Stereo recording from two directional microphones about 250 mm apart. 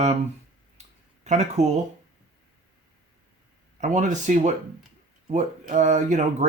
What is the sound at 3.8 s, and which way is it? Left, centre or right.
Speech, right.